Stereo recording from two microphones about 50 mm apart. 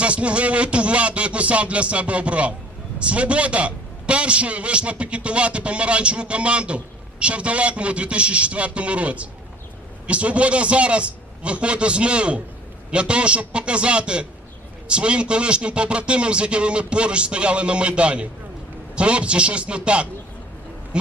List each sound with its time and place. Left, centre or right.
0.0 s a man's voice: right